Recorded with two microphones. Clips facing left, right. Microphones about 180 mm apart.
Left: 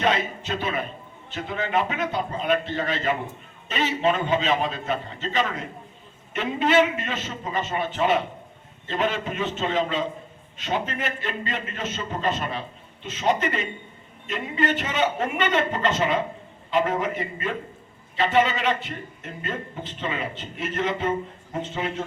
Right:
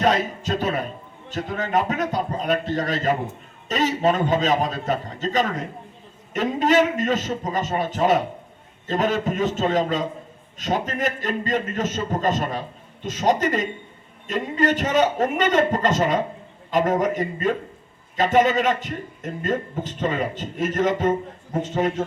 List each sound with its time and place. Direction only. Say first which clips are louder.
0.0 s a man's voice: right 3 dB; 40° right (ahead or behind)